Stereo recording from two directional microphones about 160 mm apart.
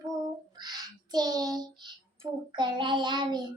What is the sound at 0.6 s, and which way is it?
Child singing, 25° right (ahead or behind).